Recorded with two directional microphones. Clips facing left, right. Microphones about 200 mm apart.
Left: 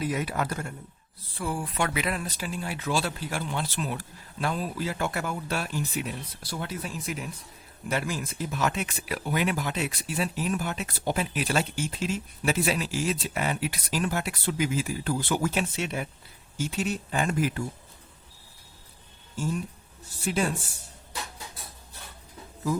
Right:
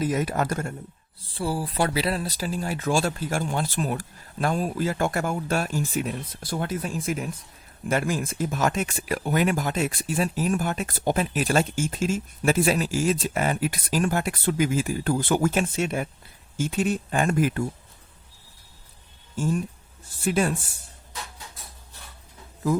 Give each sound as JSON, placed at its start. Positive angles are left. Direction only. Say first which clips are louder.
{"t": 0.0, "sound": "speech", "louder": "right 4 dB", "side_deg": -40}
{"t": 1.2, "sound": "speech", "louder": "right 4 dB", "side_deg": -30}